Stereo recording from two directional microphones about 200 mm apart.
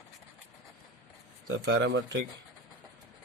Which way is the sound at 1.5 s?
65° right (ahead or behind).